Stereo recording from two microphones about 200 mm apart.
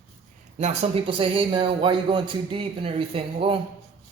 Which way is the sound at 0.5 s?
30° right (ahead or behind).